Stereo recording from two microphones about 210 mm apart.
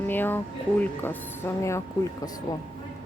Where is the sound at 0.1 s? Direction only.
10° left (ahead or behind).